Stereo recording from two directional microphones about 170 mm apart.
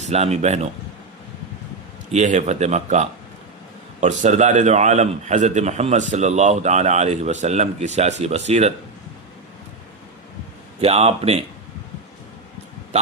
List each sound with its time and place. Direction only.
0.0 s speech: 40° right (ahead or behind)
2.1 s a man's voice: 45° right (ahead or behind)
10.8 s speech: 35° right (ahead or behind)